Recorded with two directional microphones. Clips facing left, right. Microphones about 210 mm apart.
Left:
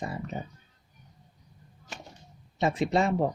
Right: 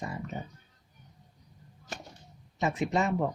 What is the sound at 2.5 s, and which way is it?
Speech, 35° left (ahead or behind).